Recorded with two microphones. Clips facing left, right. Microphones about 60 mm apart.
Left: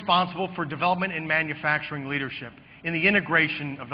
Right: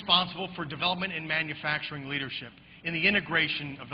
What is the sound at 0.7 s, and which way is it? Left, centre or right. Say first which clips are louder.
A man's voice: left 7 dB; left.